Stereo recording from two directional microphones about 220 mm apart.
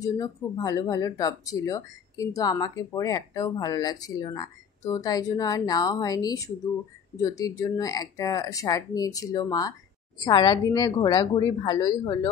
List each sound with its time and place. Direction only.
0.0 s a woman's voice: 15° left (ahead or behind)